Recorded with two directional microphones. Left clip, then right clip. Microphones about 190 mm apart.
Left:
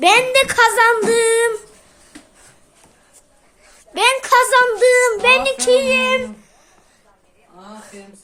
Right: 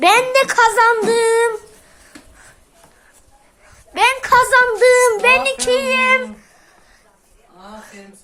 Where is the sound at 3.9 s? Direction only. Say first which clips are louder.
Right 1 dB; centre (ahead or behind).